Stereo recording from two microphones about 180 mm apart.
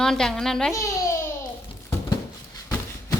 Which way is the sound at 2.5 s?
15° left (ahead or behind).